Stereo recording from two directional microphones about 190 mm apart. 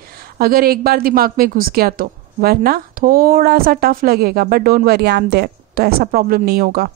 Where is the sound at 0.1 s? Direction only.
55° right (ahead or behind).